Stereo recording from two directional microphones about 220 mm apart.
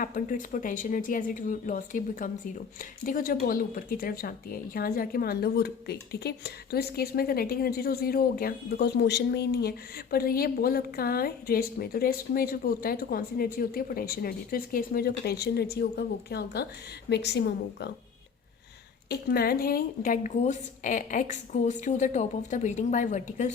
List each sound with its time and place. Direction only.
0.0 s a woman's voice: 35° left (ahead or behind)
19.0 s a woman's voice: 45° left (ahead or behind)